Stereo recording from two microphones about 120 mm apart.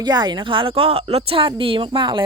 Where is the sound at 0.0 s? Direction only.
35° right (ahead or behind).